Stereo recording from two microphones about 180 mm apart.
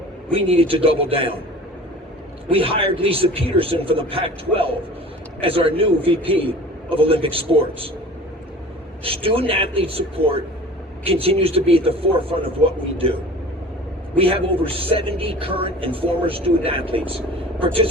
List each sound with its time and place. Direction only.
0.3 s speech: 30° right (ahead or behind)
2.5 s speech: 30° right (ahead or behind)
9.0 s speech: 30° right (ahead or behind)
14.2 s speech: 30° right (ahead or behind)